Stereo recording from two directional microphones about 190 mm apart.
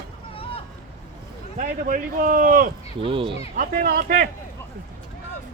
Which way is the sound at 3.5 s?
45° right (ahead or behind).